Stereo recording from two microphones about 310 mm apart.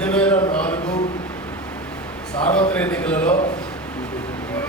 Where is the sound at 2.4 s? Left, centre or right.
Centre.